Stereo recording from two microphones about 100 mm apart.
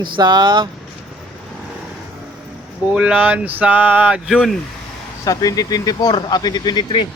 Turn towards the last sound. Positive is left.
turn(degrees=45)  # may be behind; listen again after turning